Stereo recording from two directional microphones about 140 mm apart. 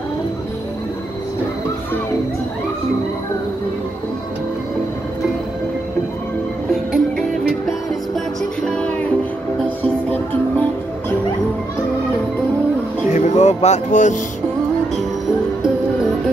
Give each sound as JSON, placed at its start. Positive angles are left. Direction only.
{"t": 6.7, "sound": "music", "side_deg": 0}
{"t": 8.6, "sound": "music", "side_deg": 10}
{"t": 13.1, "sound": "music", "side_deg": 55}